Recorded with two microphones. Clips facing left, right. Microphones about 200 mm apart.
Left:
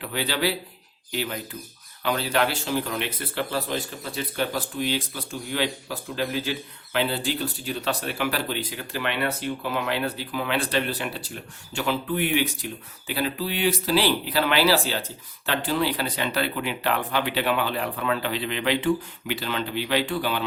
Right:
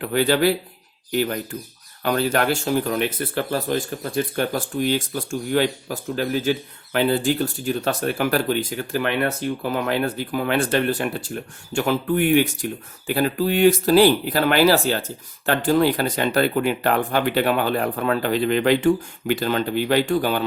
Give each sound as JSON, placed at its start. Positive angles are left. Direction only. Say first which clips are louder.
{"t": 0.0, "sound": "speech", "louder": "right 8 dB", "side_deg": -50}